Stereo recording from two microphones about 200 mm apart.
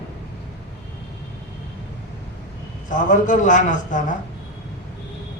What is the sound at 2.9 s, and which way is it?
A man's voice, 40° left (ahead or behind).